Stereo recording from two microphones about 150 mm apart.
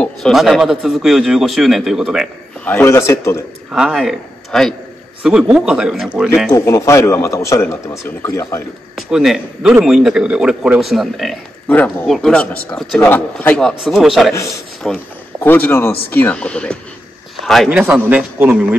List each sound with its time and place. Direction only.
0.0 s a man's voice: centre (ahead or behind)
2.6 s speech: 15° left (ahead or behind)
3.7 s a man's voice: centre (ahead or behind)
6.5 s a man's voice: 20° left (ahead or behind)
8.9 s a man's voice: centre (ahead or behind)
11.7 s speech: 10° left (ahead or behind)
13.6 s a man's voice: centre (ahead or behind)